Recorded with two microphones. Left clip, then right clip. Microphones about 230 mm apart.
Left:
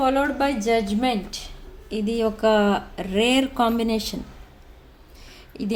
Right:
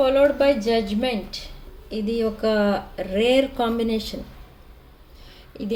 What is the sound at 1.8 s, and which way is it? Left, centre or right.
Speech, left.